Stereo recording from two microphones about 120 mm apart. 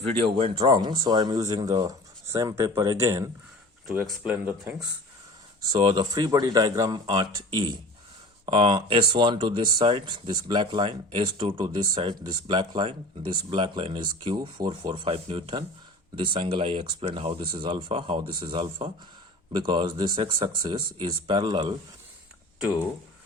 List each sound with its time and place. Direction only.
0.3 s speech: 55° right (ahead or behind)
0.7 s speech: 35° right (ahead or behind)
4.2 s speech: 15° right (ahead or behind)
5.7 s speech: 40° right (ahead or behind)